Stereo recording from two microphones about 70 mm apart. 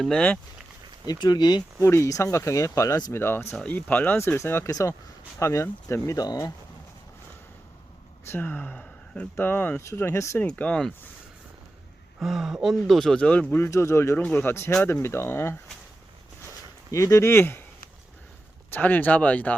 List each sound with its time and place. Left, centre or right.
0.1 s speech: centre
1.0 s speech: left
1.8 s speech: left
4.4 s speech: left
6.1 s speech: left
8.3 s speech: left
10.4 s speech: centre
12.2 s speech: centre
13.6 s speech: left
16.9 s speech: left
18.7 s speech: left